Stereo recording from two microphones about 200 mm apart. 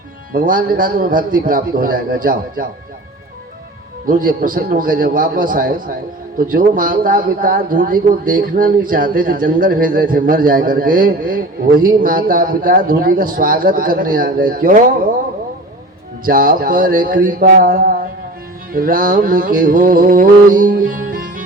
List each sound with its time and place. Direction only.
0.3 s a man's voice: 45° right (ahead or behind)
4.0 s a man's voice: 45° right (ahead or behind)
16.2 s a man's voice: 45° right (ahead or behind)